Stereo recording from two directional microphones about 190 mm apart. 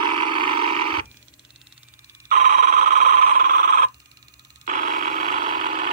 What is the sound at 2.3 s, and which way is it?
Telephone bell ringing, 40° right (ahead or behind).